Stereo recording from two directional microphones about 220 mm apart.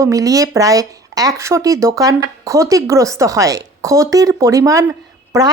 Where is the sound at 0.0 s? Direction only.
15° right (ahead or behind).